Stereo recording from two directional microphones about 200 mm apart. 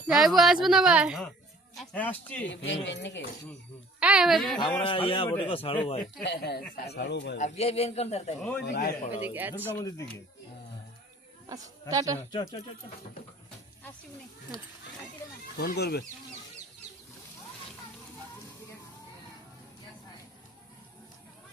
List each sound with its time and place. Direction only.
0.1 s speech: centre (ahead or behind)
2.5 s speech: 65° left (ahead or behind)
4.0 s speech: 5° right (ahead or behind)
4.9 s speech: 25° left (ahead or behind)
6.2 s speech: 55° left (ahead or behind)
7.3 s a man's voice: 35° left (ahead or behind)
8.4 s speech: 5° left (ahead or behind)
8.6 s a man's voice: 50° left (ahead or behind)
9.2 s speech: 10° right (ahead or behind)
9.7 s speech: 15° left (ahead or behind)
11.4 s a man's voice: 20° right (ahead or behind)
12.3 s speech: 20° left (ahead or behind)
15.5 s a man's voice: 55° left (ahead or behind)